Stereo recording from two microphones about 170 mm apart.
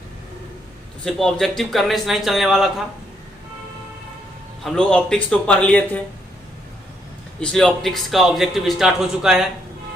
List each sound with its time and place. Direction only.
1.0 s a man's voice: 5° left (ahead or behind)
4.6 s a man's voice: 5° left (ahead or behind)
7.3 s a man's voice: 5° left (ahead or behind)